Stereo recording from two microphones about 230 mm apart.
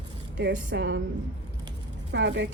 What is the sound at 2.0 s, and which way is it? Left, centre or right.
Speech, right.